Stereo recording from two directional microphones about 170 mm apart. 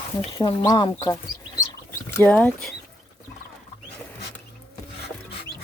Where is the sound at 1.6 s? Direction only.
15° left (ahead or behind).